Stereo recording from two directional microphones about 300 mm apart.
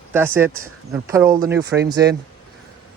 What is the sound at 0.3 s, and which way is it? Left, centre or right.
Speech, centre.